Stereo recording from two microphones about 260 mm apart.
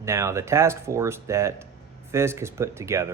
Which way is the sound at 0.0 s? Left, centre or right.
Centre.